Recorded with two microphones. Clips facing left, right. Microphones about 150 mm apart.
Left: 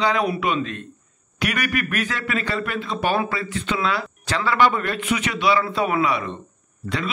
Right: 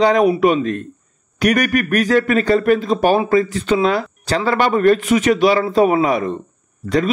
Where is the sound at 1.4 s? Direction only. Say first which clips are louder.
Right 9 dB; 45° right (ahead or behind).